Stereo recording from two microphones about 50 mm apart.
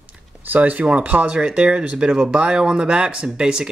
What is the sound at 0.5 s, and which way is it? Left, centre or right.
Speech, right.